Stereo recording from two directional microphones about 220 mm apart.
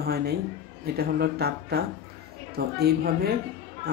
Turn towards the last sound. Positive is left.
turn(degrees=-45)  # may be behind; listen again after turning